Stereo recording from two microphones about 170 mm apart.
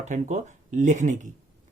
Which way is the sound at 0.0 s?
45° right (ahead or behind).